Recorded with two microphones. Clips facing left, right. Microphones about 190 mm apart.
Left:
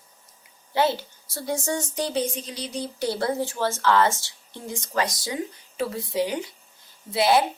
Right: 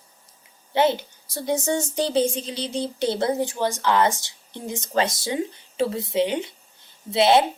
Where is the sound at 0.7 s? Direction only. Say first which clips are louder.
Right 3 dB; 20° right (ahead or behind).